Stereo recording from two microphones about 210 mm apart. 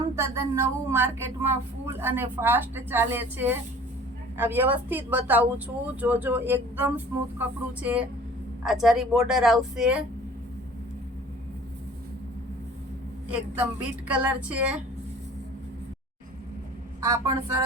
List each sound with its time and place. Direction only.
0.2 s a woman's voice: 10° right (ahead or behind)
13.3 s speech: 5° right (ahead or behind)
17.1 s speech: 15° right (ahead or behind)